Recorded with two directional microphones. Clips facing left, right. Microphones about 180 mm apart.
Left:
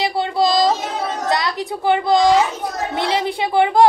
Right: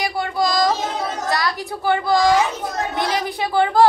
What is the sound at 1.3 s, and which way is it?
A woman's voice, 20° left (ahead or behind).